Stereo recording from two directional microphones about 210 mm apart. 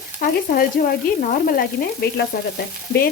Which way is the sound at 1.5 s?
45° left (ahead or behind).